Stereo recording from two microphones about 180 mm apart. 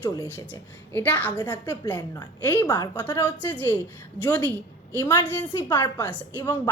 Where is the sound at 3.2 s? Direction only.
10° left (ahead or behind).